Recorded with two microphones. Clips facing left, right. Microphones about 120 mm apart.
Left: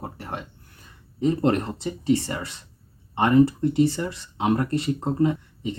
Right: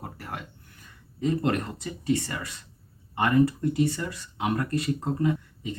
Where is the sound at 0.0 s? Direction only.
25° left (ahead or behind).